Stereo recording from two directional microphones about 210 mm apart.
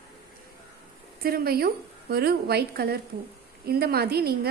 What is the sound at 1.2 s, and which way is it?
A woman's voice, 45° right (ahead or behind).